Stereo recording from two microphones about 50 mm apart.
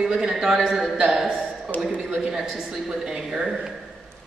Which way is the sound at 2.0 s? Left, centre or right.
Centre.